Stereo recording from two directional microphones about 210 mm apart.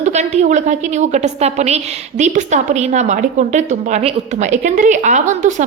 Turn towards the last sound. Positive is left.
turn(degrees=-35)  # may be behind; listen again after turning